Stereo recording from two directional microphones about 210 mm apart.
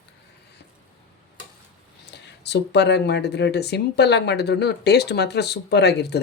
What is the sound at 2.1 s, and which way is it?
Speech, 55° left (ahead or behind).